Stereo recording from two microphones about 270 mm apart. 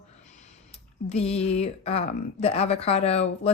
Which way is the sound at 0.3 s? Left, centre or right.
Left.